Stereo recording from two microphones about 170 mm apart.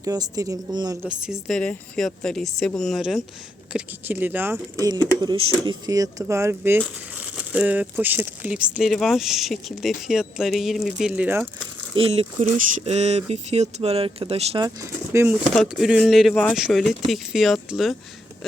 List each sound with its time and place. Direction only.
0.0 s speech: 20° right (ahead or behind)
1.0 s speech: 5° right (ahead or behind)
11.9 s speech: 35° right (ahead or behind)
14.8 s speech: 15° right (ahead or behind)